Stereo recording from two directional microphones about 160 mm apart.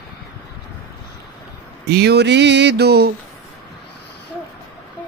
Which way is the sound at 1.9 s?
90° right.